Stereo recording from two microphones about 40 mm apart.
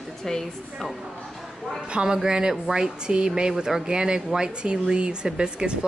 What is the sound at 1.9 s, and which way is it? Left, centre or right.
Speech, centre.